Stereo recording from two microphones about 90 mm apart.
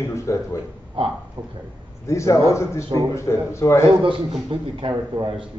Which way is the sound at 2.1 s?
35° left (ahead or behind).